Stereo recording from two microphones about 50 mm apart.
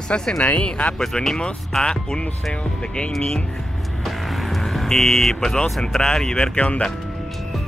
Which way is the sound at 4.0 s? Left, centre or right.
Centre.